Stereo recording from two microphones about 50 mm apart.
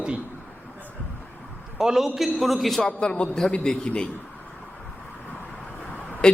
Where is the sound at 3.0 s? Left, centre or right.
Centre.